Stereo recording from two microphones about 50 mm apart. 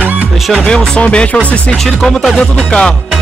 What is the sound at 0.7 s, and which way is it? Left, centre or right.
Speech, centre.